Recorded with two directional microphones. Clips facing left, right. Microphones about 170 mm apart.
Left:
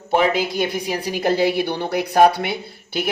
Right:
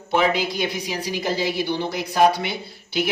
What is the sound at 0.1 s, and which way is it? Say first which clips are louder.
A man's voice: left 2 dB; 45° left (ahead or behind).